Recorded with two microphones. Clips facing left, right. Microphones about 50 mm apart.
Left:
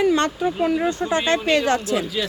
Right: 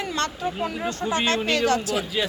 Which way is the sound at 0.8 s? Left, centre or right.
Centre.